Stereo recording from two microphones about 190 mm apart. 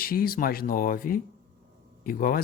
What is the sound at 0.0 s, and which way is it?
Speech, 50° left (ahead or behind).